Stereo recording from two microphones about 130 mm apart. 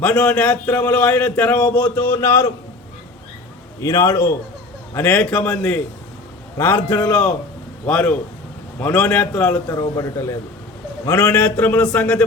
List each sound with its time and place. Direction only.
0.0 s a man's voice: 10° left (ahead or behind)
3.8 s a man's voice: 25° left (ahead or behind)
9.6 s a man's voice: 25° left (ahead or behind); by 12.2 s 10° left (ahead or behind)